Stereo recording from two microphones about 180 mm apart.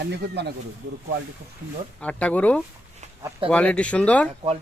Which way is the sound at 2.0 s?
5° left (ahead or behind).